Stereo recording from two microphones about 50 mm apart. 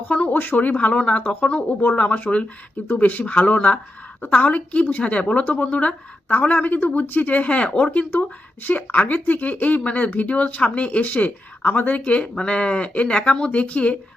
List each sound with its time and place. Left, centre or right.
0.1 s a woman's voice: left